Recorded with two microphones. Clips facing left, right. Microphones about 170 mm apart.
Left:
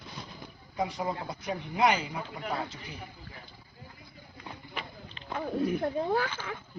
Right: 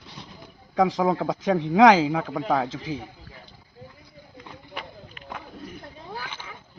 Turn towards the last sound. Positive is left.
turn(degrees=60)  # may be behind; listen again after turning